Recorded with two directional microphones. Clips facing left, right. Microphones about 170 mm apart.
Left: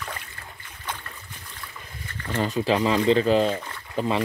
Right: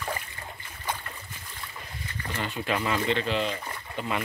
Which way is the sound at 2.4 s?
35° left (ahead or behind).